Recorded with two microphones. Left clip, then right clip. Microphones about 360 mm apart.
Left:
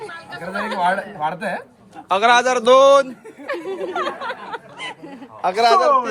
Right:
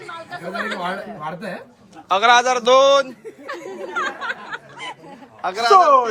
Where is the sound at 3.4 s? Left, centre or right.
Left.